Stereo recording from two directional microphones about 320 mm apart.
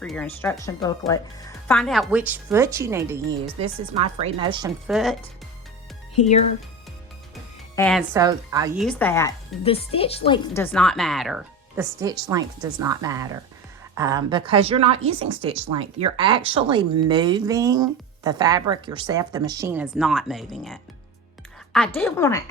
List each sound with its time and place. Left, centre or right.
0.0 s speech: centre
4.9 s speech: centre
7.8 s speech: centre
8.1 s a woman's voice: centre